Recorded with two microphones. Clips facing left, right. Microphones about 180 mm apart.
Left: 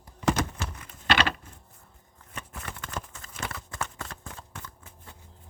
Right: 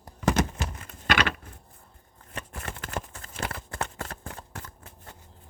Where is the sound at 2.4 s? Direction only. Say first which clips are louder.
Right 2 dB; 55° right (ahead or behind).